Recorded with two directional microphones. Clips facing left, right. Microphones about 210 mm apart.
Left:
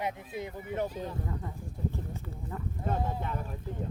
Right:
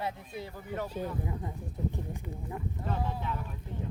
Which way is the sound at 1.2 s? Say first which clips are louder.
Right 1 dB; 15° right (ahead or behind).